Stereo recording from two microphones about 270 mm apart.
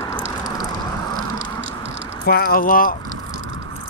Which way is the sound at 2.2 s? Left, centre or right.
Left.